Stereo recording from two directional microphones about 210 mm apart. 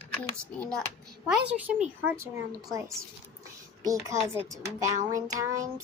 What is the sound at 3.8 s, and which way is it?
Speech, 15° right (ahead or behind).